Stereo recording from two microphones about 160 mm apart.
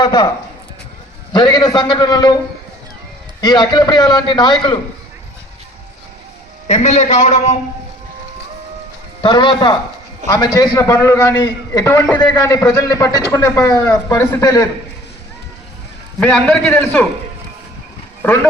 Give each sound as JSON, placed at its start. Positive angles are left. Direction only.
{"t": 0.0, "sound": "speech", "side_deg": 25}
{"t": 1.3, "sound": "a man's voice", "side_deg": 25}
{"t": 3.4, "sound": "a man's voice", "side_deg": 25}
{"t": 6.7, "sound": "a man's voice", "side_deg": 45}
{"t": 9.2, "sound": "a man's voice", "side_deg": 30}
{"t": 16.2, "sound": "a man's voice", "side_deg": 5}